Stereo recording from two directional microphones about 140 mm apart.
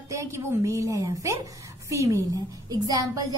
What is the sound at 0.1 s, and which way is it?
A woman's voice, 20° right (ahead or behind).